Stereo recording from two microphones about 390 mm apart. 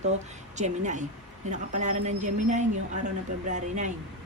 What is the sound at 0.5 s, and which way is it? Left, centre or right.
Speech, centre.